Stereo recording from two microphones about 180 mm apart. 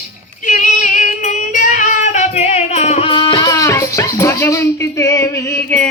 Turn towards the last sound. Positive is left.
turn(degrees=15)  # may be behind; listen again after turning